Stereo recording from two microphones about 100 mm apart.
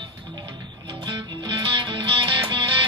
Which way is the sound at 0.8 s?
55° right (ahead or behind).